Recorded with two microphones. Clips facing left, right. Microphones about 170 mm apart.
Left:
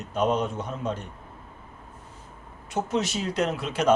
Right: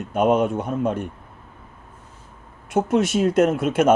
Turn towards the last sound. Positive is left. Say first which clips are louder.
# right 7 dB
turn(degrees=-50)  # may be behind; listen again after turning